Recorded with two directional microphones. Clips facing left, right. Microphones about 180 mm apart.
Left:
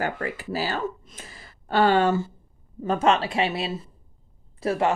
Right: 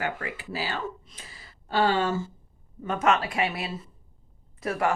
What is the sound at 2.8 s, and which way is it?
Speech, 30° left (ahead or behind).